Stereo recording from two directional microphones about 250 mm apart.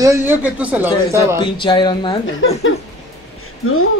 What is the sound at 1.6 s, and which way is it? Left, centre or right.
A woman's voice, centre.